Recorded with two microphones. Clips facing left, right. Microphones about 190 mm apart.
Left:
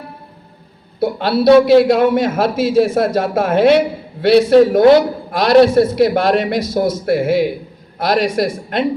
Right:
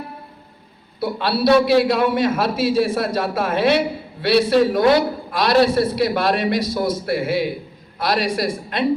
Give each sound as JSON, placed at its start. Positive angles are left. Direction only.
{"t": 0.9, "sound": "a man's voice", "side_deg": 50}